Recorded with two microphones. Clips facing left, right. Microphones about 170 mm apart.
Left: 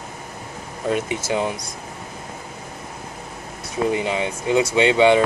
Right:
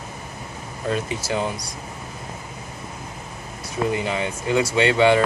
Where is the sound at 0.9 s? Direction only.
20° left (ahead or behind).